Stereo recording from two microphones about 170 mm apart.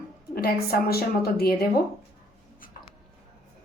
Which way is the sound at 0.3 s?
65° left (ahead or behind).